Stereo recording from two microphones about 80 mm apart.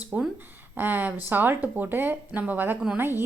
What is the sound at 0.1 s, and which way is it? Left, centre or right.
A woman's voice, centre.